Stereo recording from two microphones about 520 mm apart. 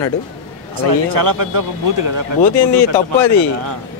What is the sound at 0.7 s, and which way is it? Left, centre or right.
A man's voice, right.